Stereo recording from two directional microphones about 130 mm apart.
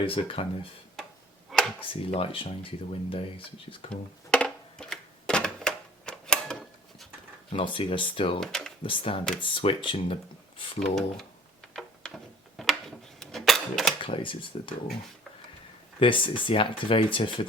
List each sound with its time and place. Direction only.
0.0 s speech: 45° left (ahead or behind)
1.5 s a sound: centre (ahead or behind)
1.9 s speech: 45° left (ahead or behind)
4.3 s typewriter: 5° left (ahead or behind)
7.5 s speech: 40° left (ahead or behind)
8.4 s speech: 5° left (ahead or behind)
8.8 s speech: 40° left (ahead or behind)
10.8 s speech: centre (ahead or behind)
11.7 s a sound: centre (ahead or behind)
13.1 s typewriter: centre (ahead or behind)
14.0 s speech: 40° left (ahead or behind)
16.0 s speech: 40° left (ahead or behind)